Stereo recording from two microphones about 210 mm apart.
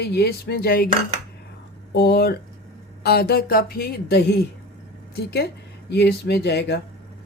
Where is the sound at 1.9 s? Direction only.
50° left (ahead or behind).